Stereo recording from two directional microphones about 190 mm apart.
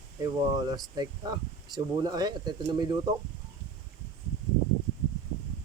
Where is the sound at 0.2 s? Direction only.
20° right (ahead or behind).